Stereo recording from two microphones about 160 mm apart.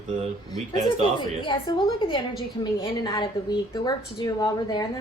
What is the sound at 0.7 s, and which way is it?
Speech, 45° right (ahead or behind).